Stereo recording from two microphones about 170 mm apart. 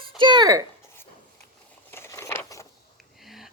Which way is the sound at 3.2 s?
Centre (ahead or behind).